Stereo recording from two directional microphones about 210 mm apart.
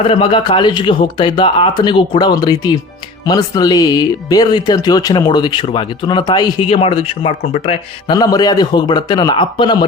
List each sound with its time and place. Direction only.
0.0 s speech: 25° left (ahead or behind)